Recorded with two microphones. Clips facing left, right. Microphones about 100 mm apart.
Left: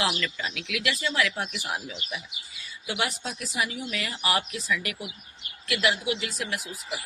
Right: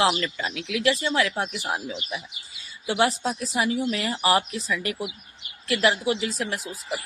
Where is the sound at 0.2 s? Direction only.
35° right (ahead or behind).